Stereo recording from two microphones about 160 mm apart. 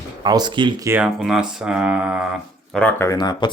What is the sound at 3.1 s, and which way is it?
Speech, 25° left (ahead or behind).